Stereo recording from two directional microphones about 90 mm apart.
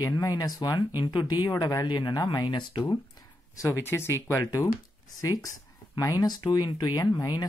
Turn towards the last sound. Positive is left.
turn(degrees=50)  # may be behind; listen again after turning